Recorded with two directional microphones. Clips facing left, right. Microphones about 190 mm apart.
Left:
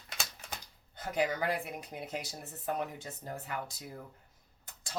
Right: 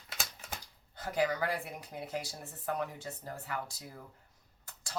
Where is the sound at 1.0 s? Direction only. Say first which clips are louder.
Even; 20° left (ahead or behind).